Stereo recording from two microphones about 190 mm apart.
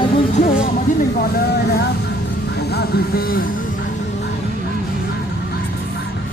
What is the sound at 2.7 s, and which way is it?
Speech, 55° left (ahead or behind).